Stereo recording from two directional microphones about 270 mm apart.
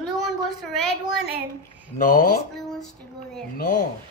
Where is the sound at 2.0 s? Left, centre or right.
Left.